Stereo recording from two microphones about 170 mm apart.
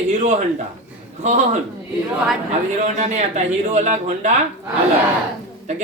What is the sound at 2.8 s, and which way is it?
Speech, 45° right (ahead or behind).